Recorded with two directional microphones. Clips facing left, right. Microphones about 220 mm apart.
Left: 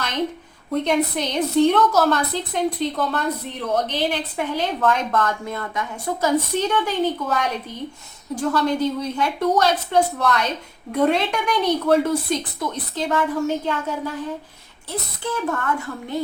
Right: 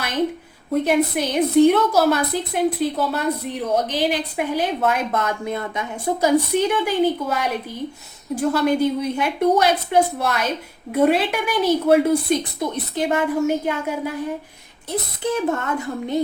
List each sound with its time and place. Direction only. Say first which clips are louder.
0.7 s a woman's voice: right 2 dB; 10° right (ahead or behind)
12.7 s a woman's voice: right 2 dB; 20° right (ahead or behind)